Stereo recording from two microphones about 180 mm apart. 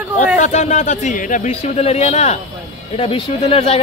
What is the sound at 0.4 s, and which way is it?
Speech, 40° left (ahead or behind).